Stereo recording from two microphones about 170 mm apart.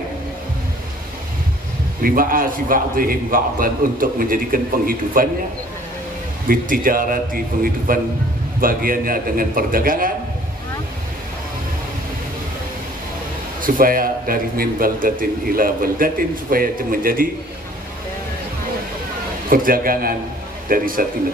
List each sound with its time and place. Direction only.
2.0 s a man's voice: 55° right (ahead or behind)
6.4 s a man's voice: 55° right (ahead or behind)
13.6 s a man's voice: 55° right (ahead or behind)
19.5 s a man's voice: 55° right (ahead or behind)